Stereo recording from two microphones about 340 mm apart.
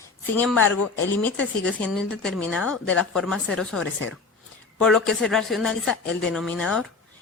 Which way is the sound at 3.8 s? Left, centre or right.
Left.